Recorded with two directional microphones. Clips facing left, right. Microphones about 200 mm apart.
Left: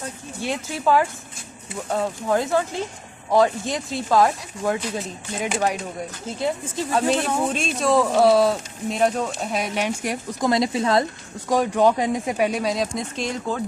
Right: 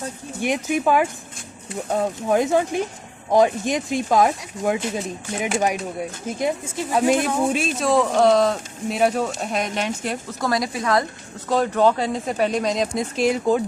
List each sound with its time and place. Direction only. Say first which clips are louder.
0.4 s speech: right 3 dB; 15° right (ahead or behind); by 10.5 s 15° left (ahead or behind)
10.5 s a woman's voice: left 2 dB; 25° left (ahead or behind)
11.4 s speech: even; 10° left (ahead or behind); by 13.6 s 10° right (ahead or behind)